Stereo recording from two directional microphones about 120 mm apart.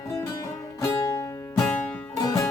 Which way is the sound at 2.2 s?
25° left (ahead or behind).